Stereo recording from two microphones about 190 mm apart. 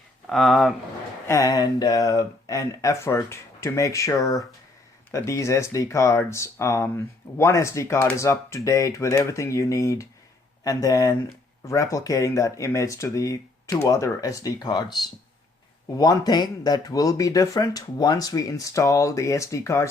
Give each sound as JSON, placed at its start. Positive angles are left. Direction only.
{"t": 0.3, "sound": "speech", "side_deg": 0}
{"t": 1.3, "sound": "speech", "side_deg": 20}
{"t": 4.2, "sound": "speech", "side_deg": 0}
{"t": 5.1, "sound": "speech", "side_deg": 15}